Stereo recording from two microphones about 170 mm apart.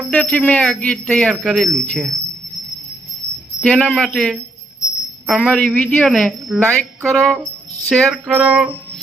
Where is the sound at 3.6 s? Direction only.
10° left (ahead or behind).